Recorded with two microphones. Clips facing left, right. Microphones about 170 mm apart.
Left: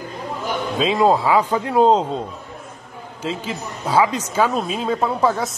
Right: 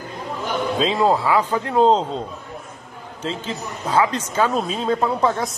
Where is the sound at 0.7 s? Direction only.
10° left (ahead or behind).